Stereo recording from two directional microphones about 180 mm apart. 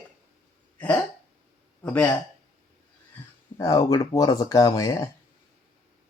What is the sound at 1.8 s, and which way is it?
Speech, 10° left (ahead or behind).